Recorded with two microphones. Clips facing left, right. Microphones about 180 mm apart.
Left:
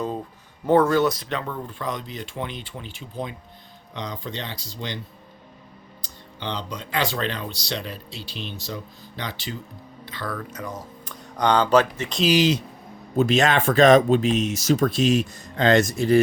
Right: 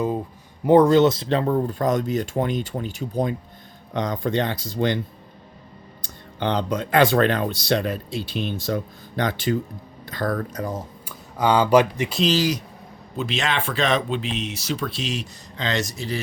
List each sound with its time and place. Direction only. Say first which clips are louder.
0.6 s speech: right 4 dB; 15° right (ahead or behind); by 4.9 s 50° right (ahead or behind)
6.0 s speech: right 9 dB; 50° right (ahead or behind); by 10.8 s 35° right (ahead or behind)
11.0 s speech: even; 5° right (ahead or behind)
12.4 s speech: left 3 dB; 25° left (ahead or behind)
13.1 s speech: left 6 dB; 45° left (ahead or behind)